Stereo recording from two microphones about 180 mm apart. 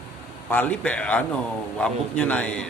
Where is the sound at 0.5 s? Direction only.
10° left (ahead or behind).